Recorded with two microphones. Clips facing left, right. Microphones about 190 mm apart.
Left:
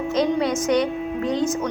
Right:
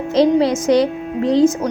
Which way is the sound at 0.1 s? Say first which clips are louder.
Right 8 dB; 30° right (ahead or behind).